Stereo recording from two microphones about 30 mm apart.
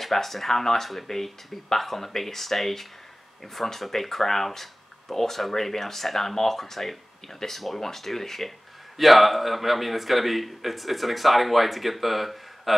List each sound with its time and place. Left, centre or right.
0.0 s speech: centre